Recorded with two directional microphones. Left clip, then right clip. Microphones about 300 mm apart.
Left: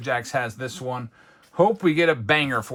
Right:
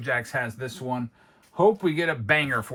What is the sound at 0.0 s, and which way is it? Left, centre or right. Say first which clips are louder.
Speech: left 2 dB; centre.